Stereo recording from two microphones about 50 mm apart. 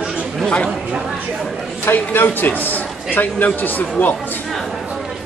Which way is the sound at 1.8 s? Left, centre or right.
Left.